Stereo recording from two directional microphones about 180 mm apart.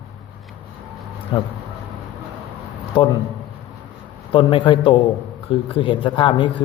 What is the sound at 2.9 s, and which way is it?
Speech, 30° left (ahead or behind).